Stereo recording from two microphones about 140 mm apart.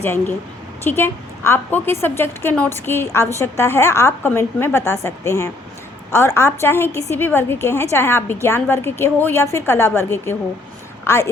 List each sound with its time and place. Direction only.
0.0 s a woman's voice: 15° left (ahead or behind)